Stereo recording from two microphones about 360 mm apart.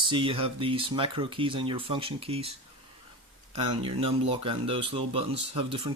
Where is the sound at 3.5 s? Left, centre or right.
Centre.